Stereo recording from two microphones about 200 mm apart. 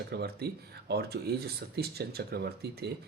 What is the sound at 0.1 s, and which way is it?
Speech, 55° right (ahead or behind).